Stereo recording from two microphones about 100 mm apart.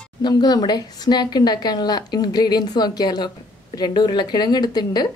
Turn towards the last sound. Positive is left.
turn(degrees=45)  # may be behind; listen again after turning